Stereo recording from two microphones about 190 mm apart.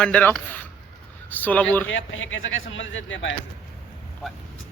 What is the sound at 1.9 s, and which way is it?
Speech, 90° left.